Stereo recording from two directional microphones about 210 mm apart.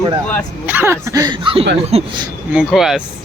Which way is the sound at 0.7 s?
10° right (ahead or behind).